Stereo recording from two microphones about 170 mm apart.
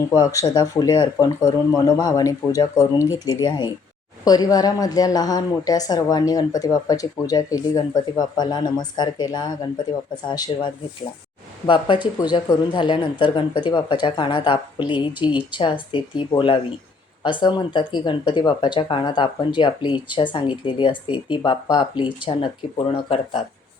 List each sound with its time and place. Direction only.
0.2 s a woman's voice: 20° left (ahead or behind); by 23.4 s 35° left (ahead or behind)